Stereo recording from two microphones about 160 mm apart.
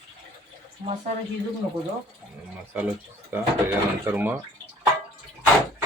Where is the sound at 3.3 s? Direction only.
15° right (ahead or behind).